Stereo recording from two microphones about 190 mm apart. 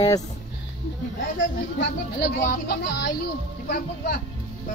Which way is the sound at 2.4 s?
45° left (ahead or behind).